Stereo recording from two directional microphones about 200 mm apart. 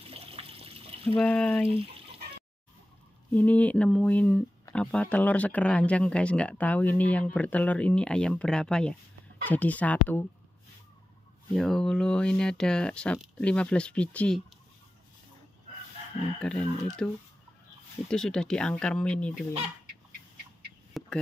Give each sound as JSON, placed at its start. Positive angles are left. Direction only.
{"t": 0.1, "sound": "water", "side_deg": -30}
{"t": 1.0, "sound": "speech", "side_deg": 5}
{"t": 3.3, "sound": "speech", "side_deg": 5}
{"t": 11.5, "sound": "speech", "side_deg": 0}
{"t": 16.3, "sound": "speech", "side_deg": 5}
{"t": 21.0, "sound": "a sound", "side_deg": 0}